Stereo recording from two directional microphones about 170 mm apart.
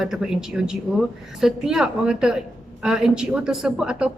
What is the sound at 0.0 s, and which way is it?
A woman's voice, 5° right (ahead or behind).